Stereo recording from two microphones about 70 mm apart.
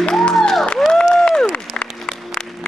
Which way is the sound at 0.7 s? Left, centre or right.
Centre.